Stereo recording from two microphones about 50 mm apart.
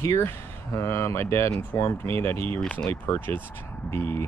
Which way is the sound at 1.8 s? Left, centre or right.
Left.